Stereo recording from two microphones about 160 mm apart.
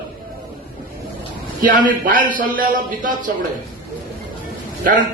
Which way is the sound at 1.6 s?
60° right (ahead or behind).